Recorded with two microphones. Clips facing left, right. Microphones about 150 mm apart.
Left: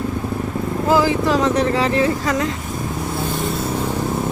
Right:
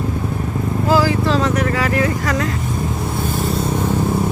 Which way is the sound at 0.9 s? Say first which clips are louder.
Even; 20° left (ahead or behind).